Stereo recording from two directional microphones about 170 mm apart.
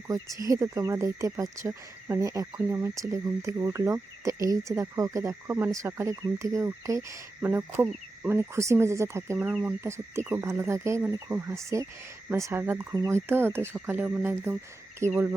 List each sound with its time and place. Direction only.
0.1 s speech: 20° right (ahead or behind)